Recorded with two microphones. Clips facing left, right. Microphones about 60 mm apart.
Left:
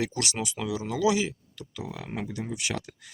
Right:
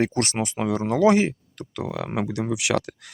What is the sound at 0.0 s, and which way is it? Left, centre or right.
Speech, right.